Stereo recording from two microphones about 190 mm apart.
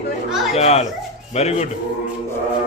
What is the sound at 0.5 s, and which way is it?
A man's voice, 35° left (ahead or behind).